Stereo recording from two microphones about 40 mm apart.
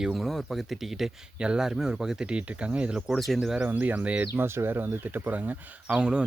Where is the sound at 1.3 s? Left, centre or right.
Right.